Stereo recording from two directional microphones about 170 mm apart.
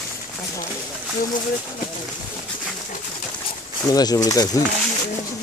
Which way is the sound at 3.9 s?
20° left (ahead or behind).